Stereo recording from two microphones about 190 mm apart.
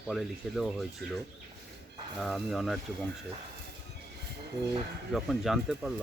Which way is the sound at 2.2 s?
Centre (ahead or behind).